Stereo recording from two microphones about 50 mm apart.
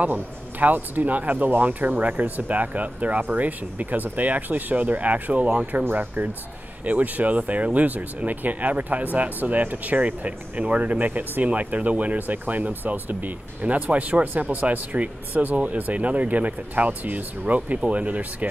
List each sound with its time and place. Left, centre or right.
0.0 s speech: right